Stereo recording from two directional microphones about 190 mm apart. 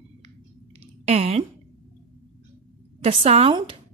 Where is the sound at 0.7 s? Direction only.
35° right (ahead or behind).